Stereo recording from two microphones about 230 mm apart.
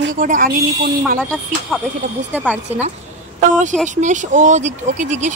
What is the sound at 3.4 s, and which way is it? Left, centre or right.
Speech, right.